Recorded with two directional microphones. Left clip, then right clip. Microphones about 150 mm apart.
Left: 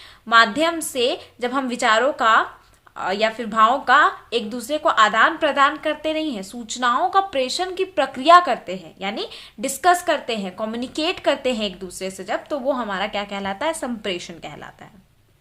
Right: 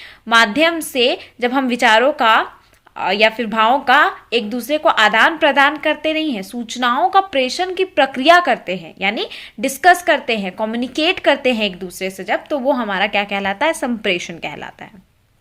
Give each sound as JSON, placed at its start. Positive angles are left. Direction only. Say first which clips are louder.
{"t": 0.3, "sound": "a woman's voice", "louder": "right 3 dB", "side_deg": -30}